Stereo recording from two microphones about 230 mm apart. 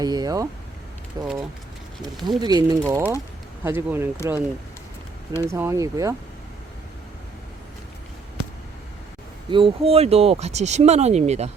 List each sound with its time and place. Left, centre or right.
0.0 s a sound: centre
1.2 s speech: centre
2.4 s speech: centre
9.5 s speech: right